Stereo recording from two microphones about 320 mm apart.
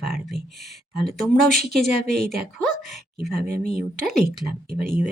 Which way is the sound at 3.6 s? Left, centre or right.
Right.